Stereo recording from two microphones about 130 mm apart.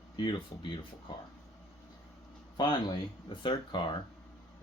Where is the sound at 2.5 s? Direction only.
35° left (ahead or behind).